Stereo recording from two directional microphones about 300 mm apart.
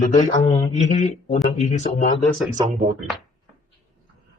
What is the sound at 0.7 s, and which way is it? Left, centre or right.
A man's voice, left.